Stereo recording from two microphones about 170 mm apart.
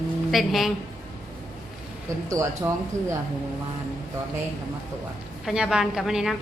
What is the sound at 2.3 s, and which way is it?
Speech, 20° right (ahead or behind).